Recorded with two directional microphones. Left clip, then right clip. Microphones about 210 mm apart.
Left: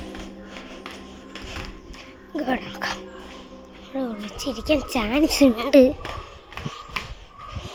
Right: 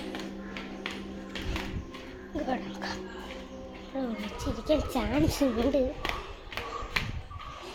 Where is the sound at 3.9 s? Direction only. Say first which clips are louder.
Left 5 dB; 35° left (ahead or behind).